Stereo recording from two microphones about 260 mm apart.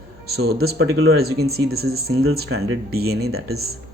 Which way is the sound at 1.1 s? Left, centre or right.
Right.